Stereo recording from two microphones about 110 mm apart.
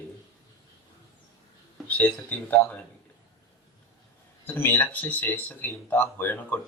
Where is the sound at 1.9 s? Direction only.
15° left (ahead or behind).